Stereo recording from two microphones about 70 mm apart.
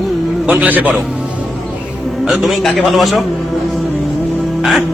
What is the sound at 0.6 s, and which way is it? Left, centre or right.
Speech, right.